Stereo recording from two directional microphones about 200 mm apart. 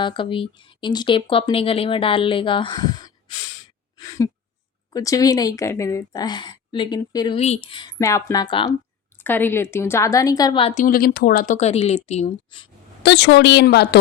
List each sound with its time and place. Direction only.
0.0 s a woman's voice: 25° left (ahead or behind)
7.3 s a woman's voice: 30° left (ahead or behind)
9.1 s a woman's voice: 10° left (ahead or behind); by 12.6 s 30° left (ahead or behind)
13.0 s a woman's voice: 60° left (ahead or behind)